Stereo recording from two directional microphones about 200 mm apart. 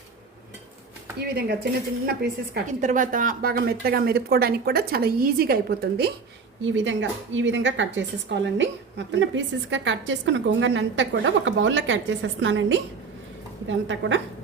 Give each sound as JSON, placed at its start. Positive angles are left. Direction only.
{"t": 1.2, "sound": "speech", "side_deg": -50}
{"t": 2.6, "sound": "speech", "side_deg": -40}
{"t": 6.6, "sound": "a woman's voice", "side_deg": -70}